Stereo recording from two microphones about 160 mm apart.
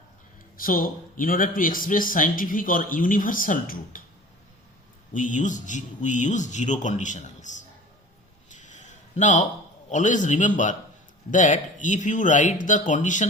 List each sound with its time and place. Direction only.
0.5 s speech: 60° left (ahead or behind)
5.1 s speech: 50° left (ahead or behind)
8.4 s a sound: 50° left (ahead or behind)
9.9 s speech: 50° left (ahead or behind)